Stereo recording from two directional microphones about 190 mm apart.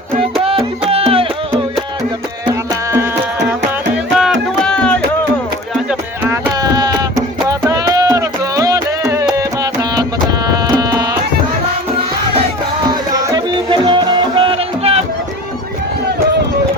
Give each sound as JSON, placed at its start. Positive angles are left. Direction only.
{"t": 0.4, "sound": "music", "side_deg": -30}
{"t": 2.5, "sound": "music", "side_deg": -15}
{"t": 4.2, "sound": "music", "side_deg": 0}
{"t": 5.9, "sound": "music", "side_deg": -10}
{"t": 10.5, "sound": "music", "side_deg": -20}
{"t": 12.9, "sound": "music", "side_deg": -20}